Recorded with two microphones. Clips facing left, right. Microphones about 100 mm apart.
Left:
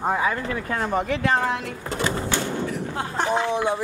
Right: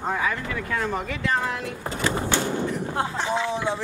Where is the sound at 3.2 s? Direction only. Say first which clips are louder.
Left 6 dB; 55° left (ahead or behind).